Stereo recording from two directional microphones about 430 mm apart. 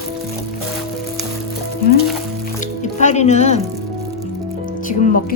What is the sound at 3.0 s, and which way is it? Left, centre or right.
Speech, centre.